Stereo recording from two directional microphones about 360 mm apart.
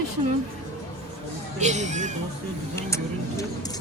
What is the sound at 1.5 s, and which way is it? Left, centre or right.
Speech, centre.